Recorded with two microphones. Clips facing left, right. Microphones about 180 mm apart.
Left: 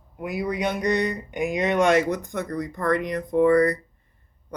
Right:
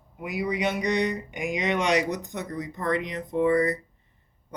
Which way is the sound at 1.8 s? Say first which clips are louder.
Left 6 dB; 50° left (ahead or behind).